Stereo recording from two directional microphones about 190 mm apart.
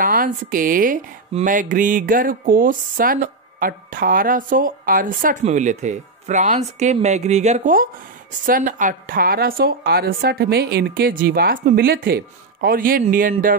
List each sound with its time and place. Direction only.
0.0 s a woman's voice: 45° right (ahead or behind)